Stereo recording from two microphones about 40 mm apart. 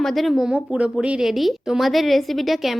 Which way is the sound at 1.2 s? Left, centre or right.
Centre.